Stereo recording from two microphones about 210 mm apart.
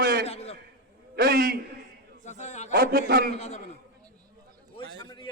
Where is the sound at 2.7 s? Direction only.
45° right (ahead or behind).